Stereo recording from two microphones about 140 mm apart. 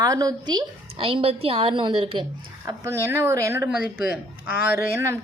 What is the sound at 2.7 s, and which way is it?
A woman's voice, 20° right (ahead or behind).